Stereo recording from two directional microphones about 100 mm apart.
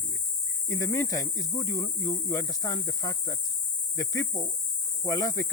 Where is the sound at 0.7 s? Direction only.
30° left (ahead or behind).